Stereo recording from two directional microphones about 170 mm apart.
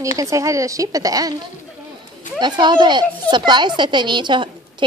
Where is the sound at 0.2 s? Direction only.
20° right (ahead or behind).